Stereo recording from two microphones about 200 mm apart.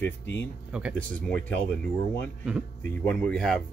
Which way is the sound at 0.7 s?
5° right (ahead or behind).